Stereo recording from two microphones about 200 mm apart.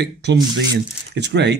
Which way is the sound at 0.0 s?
60° right (ahead or behind).